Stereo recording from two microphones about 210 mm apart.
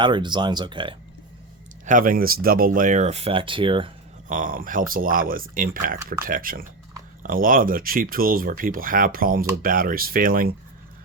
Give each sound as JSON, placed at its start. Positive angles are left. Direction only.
{"t": 0.0, "sound": "speech", "side_deg": -20}
{"t": 1.8, "sound": "speech", "side_deg": -40}
{"t": 4.3, "sound": "speech", "side_deg": -40}